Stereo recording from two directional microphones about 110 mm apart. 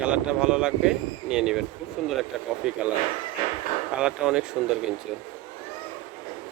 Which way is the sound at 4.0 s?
5° right (ahead or behind).